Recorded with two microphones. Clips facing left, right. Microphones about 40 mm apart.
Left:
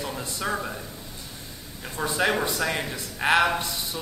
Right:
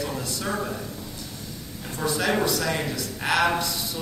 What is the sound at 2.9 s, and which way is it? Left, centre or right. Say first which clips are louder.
Speech: left 3 dB; left.